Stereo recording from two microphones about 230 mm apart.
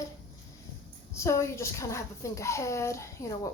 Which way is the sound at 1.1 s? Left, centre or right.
Centre.